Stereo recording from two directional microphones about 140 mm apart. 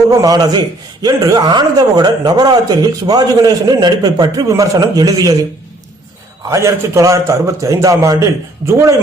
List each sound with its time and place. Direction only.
0.1 s a man's voice: 25° right (ahead or behind)
6.5 s a man's voice: 20° right (ahead or behind)